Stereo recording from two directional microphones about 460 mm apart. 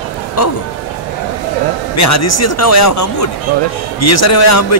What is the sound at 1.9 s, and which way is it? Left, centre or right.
Speech, left.